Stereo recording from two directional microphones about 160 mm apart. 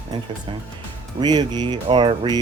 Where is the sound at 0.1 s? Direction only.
25° right (ahead or behind).